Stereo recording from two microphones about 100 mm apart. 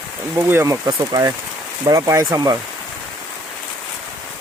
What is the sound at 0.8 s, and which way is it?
Speech, 40° right (ahead or behind).